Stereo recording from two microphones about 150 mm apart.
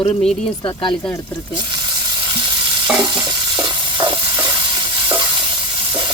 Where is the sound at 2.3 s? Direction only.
35° right (ahead or behind).